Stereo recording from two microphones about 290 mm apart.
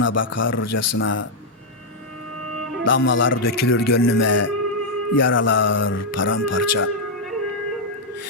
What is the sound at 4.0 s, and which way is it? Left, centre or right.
Speech, left.